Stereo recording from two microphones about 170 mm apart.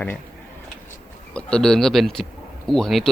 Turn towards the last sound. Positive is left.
turn(degrees=0)  # may be behind; listen again after turning